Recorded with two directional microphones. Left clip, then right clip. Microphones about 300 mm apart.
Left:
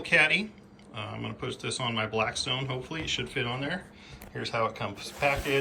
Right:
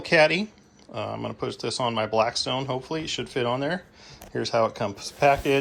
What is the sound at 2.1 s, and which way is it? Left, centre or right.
Speech, right.